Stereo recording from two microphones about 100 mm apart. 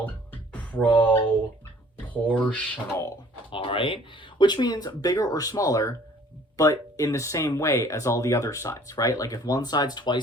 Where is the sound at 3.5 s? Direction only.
60° left (ahead or behind).